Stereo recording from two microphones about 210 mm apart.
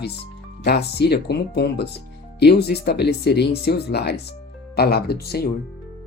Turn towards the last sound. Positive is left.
turn(degrees=50)  # may be behind; listen again after turning